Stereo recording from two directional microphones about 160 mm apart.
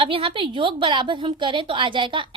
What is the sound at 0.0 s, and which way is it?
A woman's voice, 35° right (ahead or behind).